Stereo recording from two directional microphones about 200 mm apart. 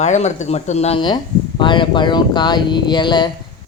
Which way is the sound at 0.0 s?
35° left (ahead or behind).